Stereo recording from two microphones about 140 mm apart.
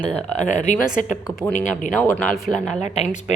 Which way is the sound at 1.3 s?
20° left (ahead or behind).